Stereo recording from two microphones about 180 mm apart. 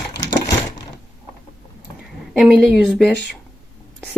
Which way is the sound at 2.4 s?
Centre (ahead or behind).